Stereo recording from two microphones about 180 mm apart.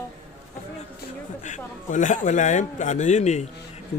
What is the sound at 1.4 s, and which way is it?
A man's voice, 45° left (ahead or behind).